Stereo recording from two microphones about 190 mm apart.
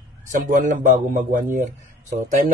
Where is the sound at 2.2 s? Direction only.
40° right (ahead or behind).